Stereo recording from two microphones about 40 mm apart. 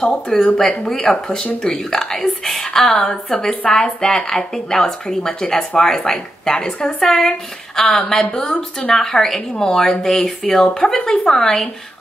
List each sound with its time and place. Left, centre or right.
0.0 s speech: centre
3.1 s speech: left
8.4 s speech: left
8.9 s speech: centre